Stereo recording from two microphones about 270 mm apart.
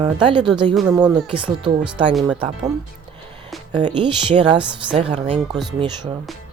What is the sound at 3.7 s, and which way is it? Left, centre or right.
Speech, centre.